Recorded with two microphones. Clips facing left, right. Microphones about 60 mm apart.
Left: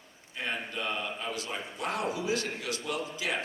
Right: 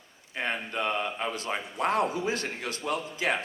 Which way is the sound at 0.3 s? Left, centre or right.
Right.